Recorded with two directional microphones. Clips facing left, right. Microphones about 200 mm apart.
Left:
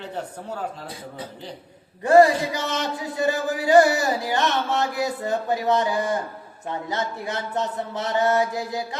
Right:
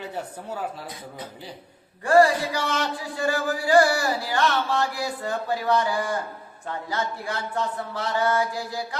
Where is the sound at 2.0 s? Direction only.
20° left (ahead or behind).